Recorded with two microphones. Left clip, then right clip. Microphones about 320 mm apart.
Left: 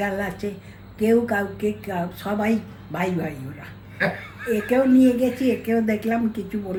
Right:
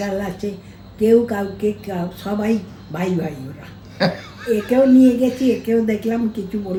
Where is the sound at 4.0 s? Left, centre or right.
Centre.